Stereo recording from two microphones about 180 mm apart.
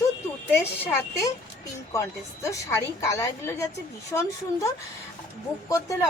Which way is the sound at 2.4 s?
15° left (ahead or behind).